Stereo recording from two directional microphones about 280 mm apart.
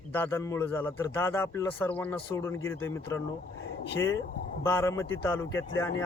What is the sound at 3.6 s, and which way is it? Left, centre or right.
Speech, left.